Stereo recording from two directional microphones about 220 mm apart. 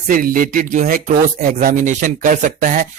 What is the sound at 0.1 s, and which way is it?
Speech, 40° right (ahead or behind).